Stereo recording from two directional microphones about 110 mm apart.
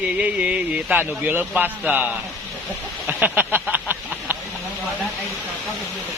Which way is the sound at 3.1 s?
15° right (ahead or behind).